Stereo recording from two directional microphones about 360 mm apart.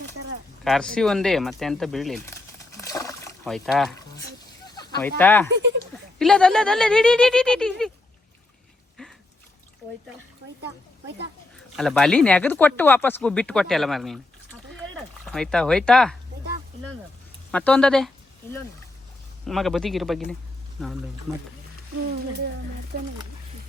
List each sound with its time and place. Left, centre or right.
0.6 s speech: centre
2.7 s rowboat: centre
4.6 s a sound: centre
6.1 s speech: centre
9.0 s a sound: centre
11.8 s speech: centre
15.2 s speech: centre
17.5 s speech: centre
19.5 s speech: centre
22.9 s speech: right